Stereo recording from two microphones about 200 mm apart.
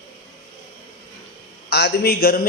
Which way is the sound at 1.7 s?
55° left (ahead or behind).